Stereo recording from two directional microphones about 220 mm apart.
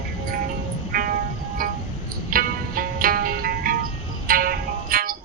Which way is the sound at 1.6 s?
40° right (ahead or behind).